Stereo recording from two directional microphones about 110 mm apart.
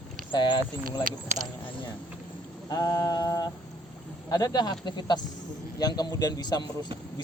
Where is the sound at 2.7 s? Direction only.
35° left (ahead or behind).